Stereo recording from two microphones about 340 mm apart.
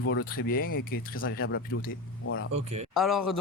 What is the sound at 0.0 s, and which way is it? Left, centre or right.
Speech, left.